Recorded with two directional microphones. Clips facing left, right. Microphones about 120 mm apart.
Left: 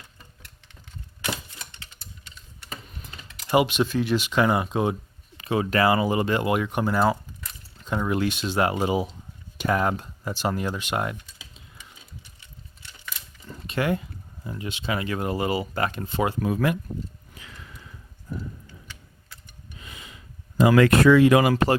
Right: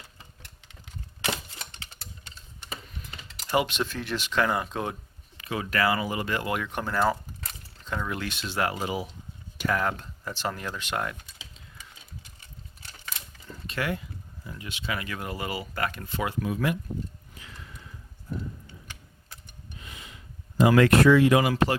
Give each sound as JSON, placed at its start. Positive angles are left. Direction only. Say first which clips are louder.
{"t": 1.2, "sound": "typewriter", "louder": "even", "side_deg": -30}
{"t": 3.5, "sound": "speech", "louder": "left 5 dB", "side_deg": 10}
{"t": 5.4, "sound": "speech", "louder": "left 5 dB", "side_deg": 25}
{"t": 13.5, "sound": "a sound", "louder": "left 5 dB", "side_deg": 20}
{"t": 14.4, "sound": "speech", "louder": "left 5 dB", "side_deg": 25}
{"t": 16.4, "sound": "speech", "louder": "left 1 dB", "side_deg": 50}
{"t": 21.4, "sound": "speech", "louder": "left 4 dB", "side_deg": 45}